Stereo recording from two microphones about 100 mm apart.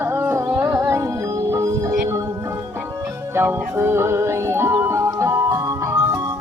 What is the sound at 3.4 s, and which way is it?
Music, 25° right (ahead or behind).